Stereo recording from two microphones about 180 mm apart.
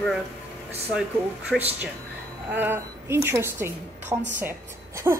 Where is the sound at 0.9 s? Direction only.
5° right (ahead or behind).